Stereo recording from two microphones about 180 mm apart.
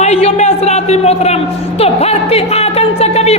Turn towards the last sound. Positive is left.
turn(degrees=35)  # may be behind; listen again after turning